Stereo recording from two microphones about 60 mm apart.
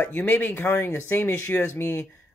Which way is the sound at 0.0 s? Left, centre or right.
Left.